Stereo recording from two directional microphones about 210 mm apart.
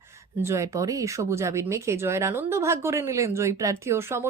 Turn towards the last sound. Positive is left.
turn(degrees=-10)  # may be behind; listen again after turning